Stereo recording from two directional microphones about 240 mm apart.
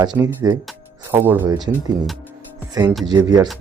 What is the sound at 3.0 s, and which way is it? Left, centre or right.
Speech, centre.